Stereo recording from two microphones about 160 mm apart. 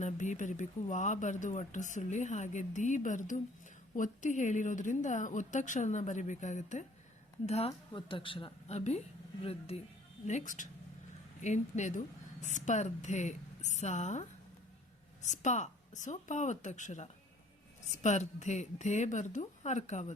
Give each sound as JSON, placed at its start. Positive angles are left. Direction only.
{"t": 0.0, "sound": "a woman's voice", "side_deg": 50}
{"t": 10.2, "sound": "speech", "side_deg": 50}